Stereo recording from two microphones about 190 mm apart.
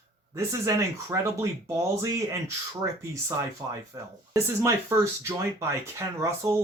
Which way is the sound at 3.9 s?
15° right (ahead or behind).